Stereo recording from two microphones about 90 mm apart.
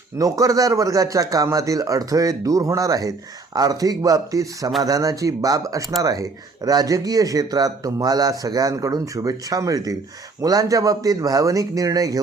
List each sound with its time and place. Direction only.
0.2 s a man's voice: 40° right (ahead or behind)